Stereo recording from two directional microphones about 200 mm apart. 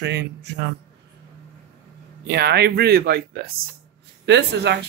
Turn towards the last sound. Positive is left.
turn(degrees=-60)  # may be behind; listen again after turning